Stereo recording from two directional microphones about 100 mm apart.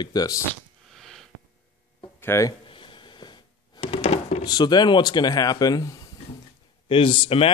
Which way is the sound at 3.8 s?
90° left.